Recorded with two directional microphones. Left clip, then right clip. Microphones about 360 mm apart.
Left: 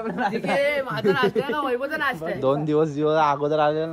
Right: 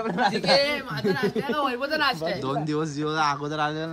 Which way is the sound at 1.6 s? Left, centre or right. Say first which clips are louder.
Even; centre.